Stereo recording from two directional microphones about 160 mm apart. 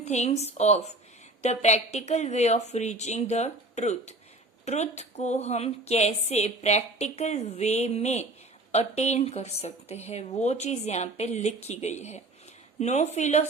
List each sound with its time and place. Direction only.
0.0 s a woman's voice: 45° left (ahead or behind)